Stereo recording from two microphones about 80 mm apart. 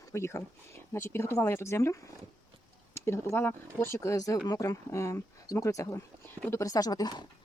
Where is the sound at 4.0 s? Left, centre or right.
Left.